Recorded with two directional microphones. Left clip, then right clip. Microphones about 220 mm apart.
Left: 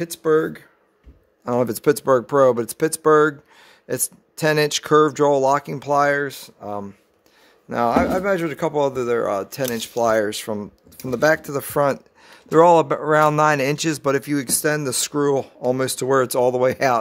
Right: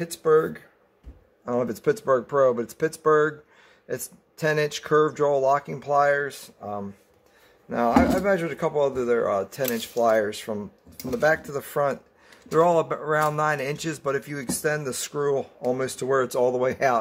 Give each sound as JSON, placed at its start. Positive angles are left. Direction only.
{"t": 0.0, "sound": "speech", "side_deg": 55}